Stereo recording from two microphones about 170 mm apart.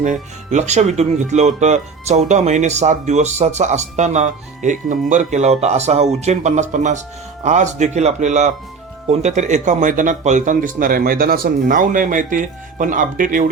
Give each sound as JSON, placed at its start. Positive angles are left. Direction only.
{"t": 0.0, "sound": "speech", "side_deg": -45}